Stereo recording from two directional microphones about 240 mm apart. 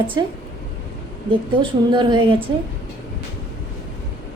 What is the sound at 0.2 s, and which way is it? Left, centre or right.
Speech, centre.